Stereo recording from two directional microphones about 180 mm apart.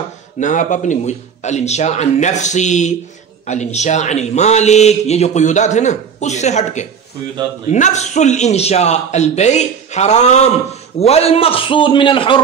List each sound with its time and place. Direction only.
0.4 s a man's voice: 45° left (ahead or behind); by 12.4 s 30° left (ahead or behind)